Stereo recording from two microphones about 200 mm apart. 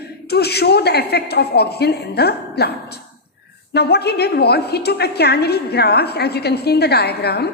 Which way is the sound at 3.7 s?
55° left (ahead or behind).